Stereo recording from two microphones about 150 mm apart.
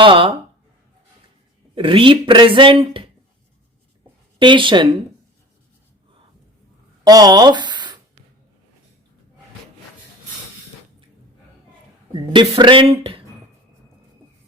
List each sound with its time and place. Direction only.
0.0 s speech: 35° right (ahead or behind)
1.7 s speech: 35° right (ahead or behind)
4.4 s speech: 35° right (ahead or behind)
7.0 s speech: 25° right (ahead or behind)
12.3 s speech: 30° right (ahead or behind)